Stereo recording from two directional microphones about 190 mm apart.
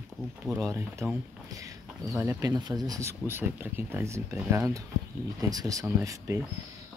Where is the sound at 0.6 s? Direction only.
15° right (ahead or behind).